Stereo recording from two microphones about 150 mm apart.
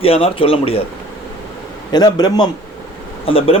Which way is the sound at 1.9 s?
25° left (ahead or behind).